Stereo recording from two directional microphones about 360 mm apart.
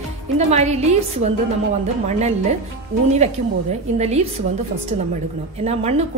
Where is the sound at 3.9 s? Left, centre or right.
Centre.